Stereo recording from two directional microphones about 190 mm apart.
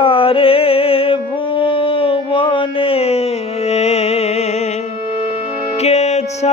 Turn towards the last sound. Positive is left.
turn(degrees=35)  # may be behind; listen again after turning